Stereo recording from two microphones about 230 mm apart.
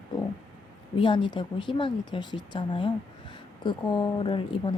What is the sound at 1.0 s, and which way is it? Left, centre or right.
Speech, left.